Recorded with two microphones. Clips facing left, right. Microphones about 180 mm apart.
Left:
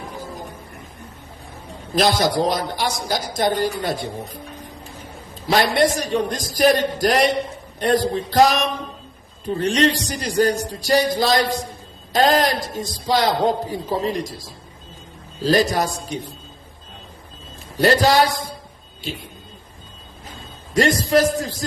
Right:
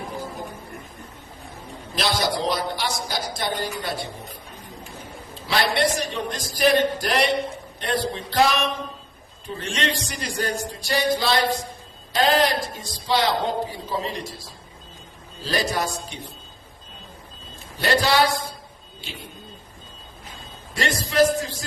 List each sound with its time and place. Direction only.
2.0 s speech: 45° left (ahead or behind)
5.7 s a man's voice: 40° left (ahead or behind)
17.7 s a man's voice: 40° left (ahead or behind)
21.0 s a man's voice: 40° left (ahead or behind)